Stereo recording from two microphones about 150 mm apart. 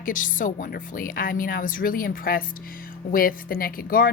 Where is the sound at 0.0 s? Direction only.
65° left (ahead or behind).